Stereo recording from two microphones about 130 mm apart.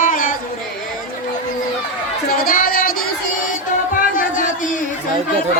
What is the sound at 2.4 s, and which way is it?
Music, 90° left.